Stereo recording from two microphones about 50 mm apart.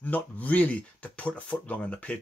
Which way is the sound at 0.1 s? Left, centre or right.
Left.